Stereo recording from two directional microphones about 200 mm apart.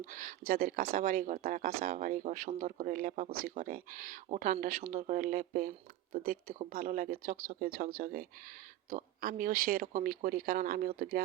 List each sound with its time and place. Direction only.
0.0 s speech: 45° right (ahead or behind)